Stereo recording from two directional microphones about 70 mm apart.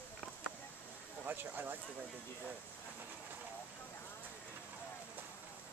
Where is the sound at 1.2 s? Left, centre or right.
Right.